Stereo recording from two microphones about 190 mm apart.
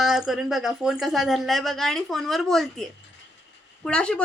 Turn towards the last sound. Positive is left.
turn(degrees=5)  # may be behind; listen again after turning